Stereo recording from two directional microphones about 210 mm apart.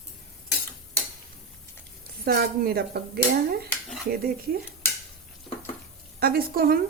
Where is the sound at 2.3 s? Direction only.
45° right (ahead or behind).